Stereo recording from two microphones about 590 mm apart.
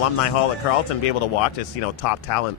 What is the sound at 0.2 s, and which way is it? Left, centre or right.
Speech, left.